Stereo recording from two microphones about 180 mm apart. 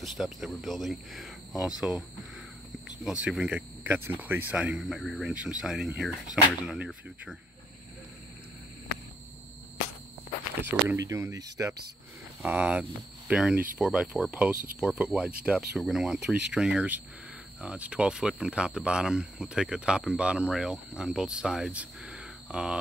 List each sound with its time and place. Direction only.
0.0 s speech: centre (ahead or behind)
10.6 s speech: 15° right (ahead or behind)
12.4 s speech: 5° right (ahead or behind)